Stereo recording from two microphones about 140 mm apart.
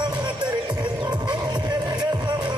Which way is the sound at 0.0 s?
30° right (ahead or behind).